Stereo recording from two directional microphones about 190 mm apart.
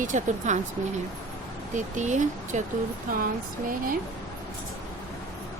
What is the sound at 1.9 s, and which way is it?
Speech, 40° right (ahead or behind).